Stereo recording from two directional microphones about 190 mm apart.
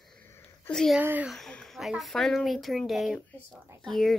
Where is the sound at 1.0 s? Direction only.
10° right (ahead or behind).